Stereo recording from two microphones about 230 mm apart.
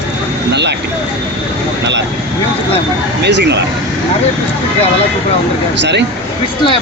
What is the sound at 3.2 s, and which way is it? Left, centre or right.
Speech, right.